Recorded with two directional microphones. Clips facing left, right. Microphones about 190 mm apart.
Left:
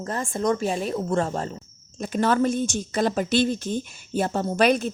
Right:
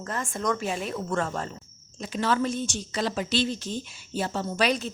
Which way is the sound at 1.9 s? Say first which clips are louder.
Left 5 dB; 50° left (ahead or behind).